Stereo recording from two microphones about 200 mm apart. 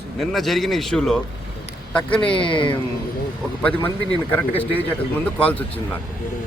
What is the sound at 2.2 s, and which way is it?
Speech, 25° left (ahead or behind).